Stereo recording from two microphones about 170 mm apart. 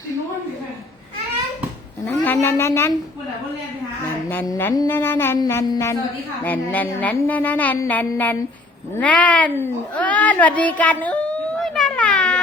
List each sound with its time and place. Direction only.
2.2 s speech: 10° left (ahead or behind)
4.3 s a child's voice: 10° left (ahead or behind)
11.6 s baby cry: centre (ahead or behind)